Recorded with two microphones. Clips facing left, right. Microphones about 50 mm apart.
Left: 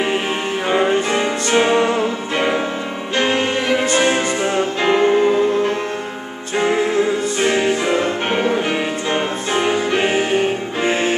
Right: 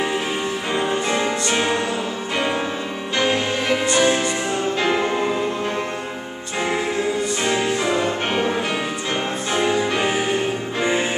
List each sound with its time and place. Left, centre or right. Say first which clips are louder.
0.7 s music: left 6 dB; left
1.2 s music: left 4 dB; left
3.2 s music: left 3 dB; left
3.9 s music: even; left
5.1 s music: left 7 dB; centre
7.4 s music: left 5 dB; left
8.0 s music: left 3 dB; centre
9.9 s music: left 4 dB; left